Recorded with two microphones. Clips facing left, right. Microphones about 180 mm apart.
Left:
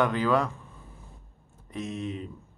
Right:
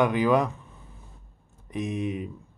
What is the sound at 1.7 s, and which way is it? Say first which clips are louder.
Speech: right 4 dB; 15° right (ahead or behind).